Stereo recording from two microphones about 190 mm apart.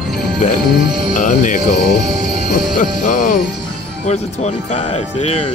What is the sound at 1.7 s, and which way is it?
Speech, 55° left (ahead or behind).